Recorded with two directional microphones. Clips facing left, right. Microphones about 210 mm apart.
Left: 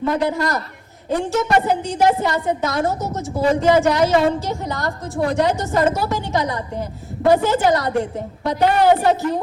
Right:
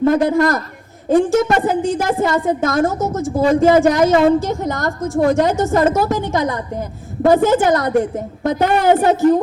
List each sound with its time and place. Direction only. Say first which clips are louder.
0.0 s a woman's voice: right 6 dB; 50° right (ahead or behind)